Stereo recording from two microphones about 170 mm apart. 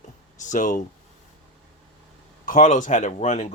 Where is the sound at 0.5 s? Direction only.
50° left (ahead or behind).